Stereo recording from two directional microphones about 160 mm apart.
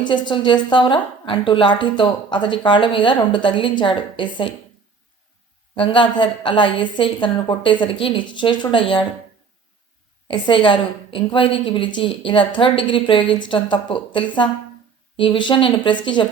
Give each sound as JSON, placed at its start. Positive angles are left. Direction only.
{"t": 0.0, "sound": "a woman's voice", "side_deg": 30}
{"t": 5.7, "sound": "a woman's voice", "side_deg": 30}
{"t": 10.2, "sound": "a woman's voice", "side_deg": 30}